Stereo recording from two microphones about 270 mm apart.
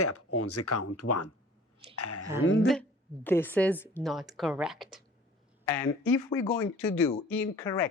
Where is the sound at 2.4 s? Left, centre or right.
Left.